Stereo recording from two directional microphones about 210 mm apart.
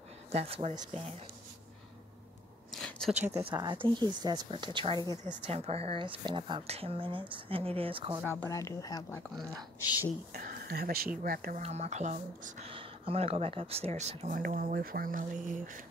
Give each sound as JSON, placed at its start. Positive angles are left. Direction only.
{"t": 0.3, "sound": "speech", "side_deg": -30}
{"t": 2.7, "sound": "a sound", "side_deg": 0}
{"t": 3.4, "sound": "speech", "side_deg": -20}
{"t": 8.4, "sound": "speech", "side_deg": 15}
{"t": 10.3, "sound": "speech", "side_deg": -45}
{"t": 11.6, "sound": "speech", "side_deg": -30}